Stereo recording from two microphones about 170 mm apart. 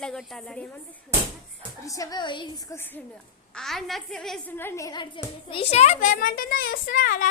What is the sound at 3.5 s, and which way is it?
A woman's voice, centre (ahead or behind).